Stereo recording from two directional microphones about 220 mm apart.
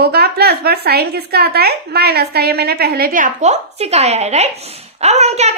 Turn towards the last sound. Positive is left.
turn(degrees=-30)  # may be behind; listen again after turning